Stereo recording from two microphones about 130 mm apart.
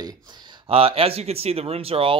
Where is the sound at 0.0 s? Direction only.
35° right (ahead or behind).